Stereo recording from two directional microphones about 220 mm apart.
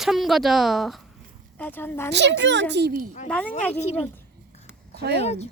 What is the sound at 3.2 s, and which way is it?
Speech, 5° left (ahead or behind).